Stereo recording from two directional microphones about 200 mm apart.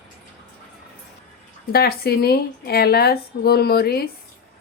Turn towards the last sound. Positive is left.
turn(degrees=50)  # may be behind; listen again after turning